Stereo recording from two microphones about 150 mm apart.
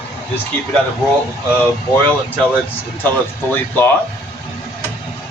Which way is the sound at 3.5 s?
15° left (ahead or behind).